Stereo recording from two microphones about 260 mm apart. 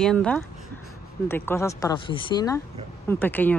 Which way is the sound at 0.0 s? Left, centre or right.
Centre.